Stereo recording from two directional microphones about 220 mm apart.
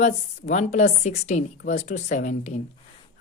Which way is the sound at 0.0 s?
35° left (ahead or behind).